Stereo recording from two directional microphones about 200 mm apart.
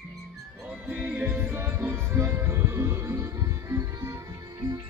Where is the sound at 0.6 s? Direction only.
5° right (ahead or behind).